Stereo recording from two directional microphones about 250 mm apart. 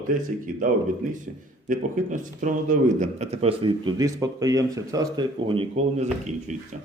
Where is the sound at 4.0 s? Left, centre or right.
Centre.